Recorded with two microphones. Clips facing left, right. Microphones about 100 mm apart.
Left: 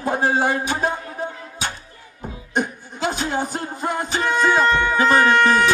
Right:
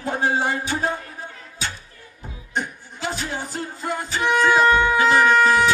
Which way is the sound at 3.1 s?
20° left (ahead or behind).